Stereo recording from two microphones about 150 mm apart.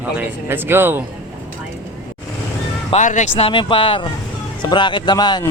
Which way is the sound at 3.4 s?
35° left (ahead or behind).